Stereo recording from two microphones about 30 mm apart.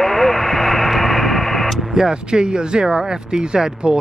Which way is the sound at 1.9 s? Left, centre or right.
Right.